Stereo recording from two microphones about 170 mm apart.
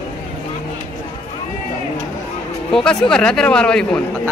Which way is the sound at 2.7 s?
5° left (ahead or behind).